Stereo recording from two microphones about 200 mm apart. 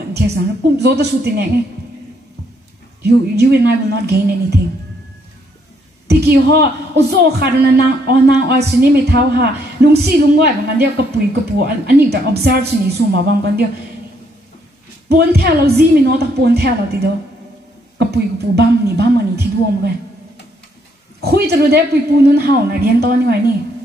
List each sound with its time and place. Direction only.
0.1 s speech: 55° right (ahead or behind)
3.0 s speech: 55° right (ahead or behind)
6.0 s a sound: 55° right (ahead or behind)
7.1 s a woman's voice: 55° right (ahead or behind)
15.0 s speech: 55° right (ahead or behind)
21.2 s a woman's voice: 55° right (ahead or behind)